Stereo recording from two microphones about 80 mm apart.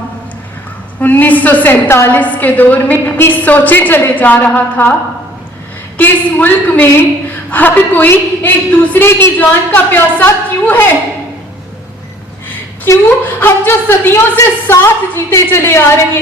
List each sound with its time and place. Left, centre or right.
0.9 s a woman's voice: left
6.0 s a woman's voice: left
13.1 s a woman's voice: left